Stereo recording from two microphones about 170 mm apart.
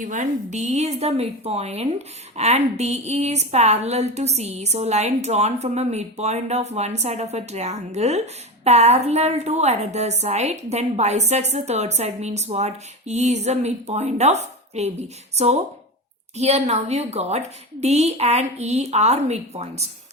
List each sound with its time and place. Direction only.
0.0 s a woman's voice: 45° right (ahead or behind)